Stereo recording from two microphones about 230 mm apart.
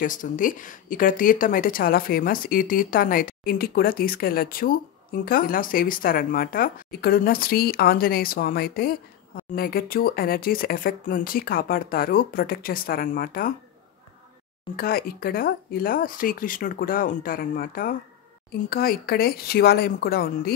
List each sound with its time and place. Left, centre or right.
0.0 s speech: left
14.8 s speech: left